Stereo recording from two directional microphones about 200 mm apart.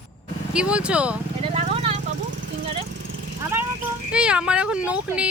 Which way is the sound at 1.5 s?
30° right (ahead or behind).